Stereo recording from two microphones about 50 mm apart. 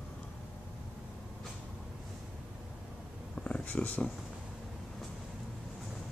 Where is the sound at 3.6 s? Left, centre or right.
Left.